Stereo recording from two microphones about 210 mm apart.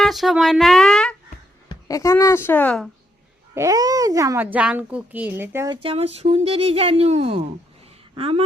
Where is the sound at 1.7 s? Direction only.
15° left (ahead or behind).